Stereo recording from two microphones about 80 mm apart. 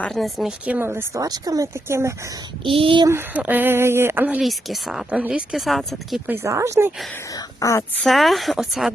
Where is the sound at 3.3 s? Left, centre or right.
Right.